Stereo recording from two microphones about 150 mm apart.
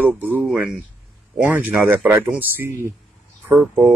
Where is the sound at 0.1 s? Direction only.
10° right (ahead or behind).